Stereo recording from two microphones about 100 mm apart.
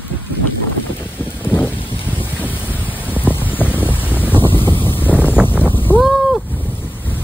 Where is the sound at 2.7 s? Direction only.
20° left (ahead or behind).